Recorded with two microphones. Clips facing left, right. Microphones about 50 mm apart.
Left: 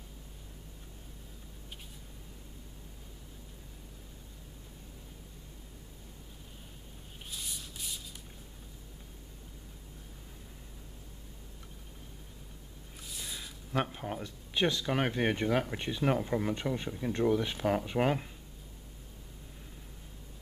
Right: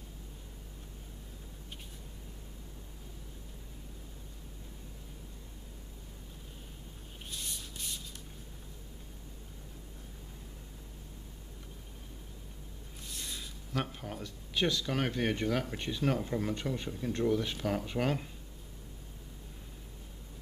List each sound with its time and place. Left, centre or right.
7.2 s spray: centre
13.0 s a sound: centre
13.8 s speech: centre